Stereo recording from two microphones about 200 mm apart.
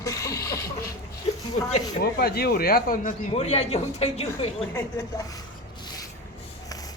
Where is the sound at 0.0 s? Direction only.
15° left (ahead or behind).